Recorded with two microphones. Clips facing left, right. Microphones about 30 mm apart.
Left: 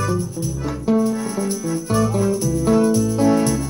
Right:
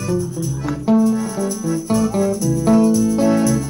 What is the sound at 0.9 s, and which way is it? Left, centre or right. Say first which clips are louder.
Music: right 3 dB; centre.